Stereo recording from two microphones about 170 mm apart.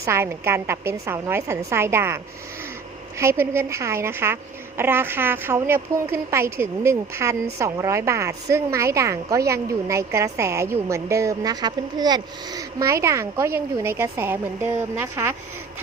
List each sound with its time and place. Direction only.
0.0 s a woman's voice: 15° right (ahead or behind)